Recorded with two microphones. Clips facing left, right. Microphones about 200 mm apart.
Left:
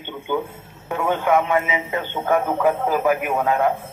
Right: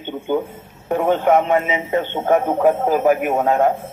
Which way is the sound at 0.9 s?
40° right (ahead or behind).